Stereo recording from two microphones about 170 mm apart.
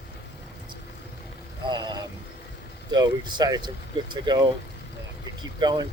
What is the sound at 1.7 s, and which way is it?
Vehicle, 25° right (ahead or behind).